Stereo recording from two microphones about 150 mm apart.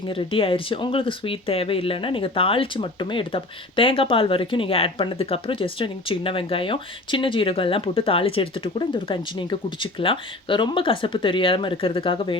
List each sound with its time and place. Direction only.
0.1 s speech: 35° left (ahead or behind)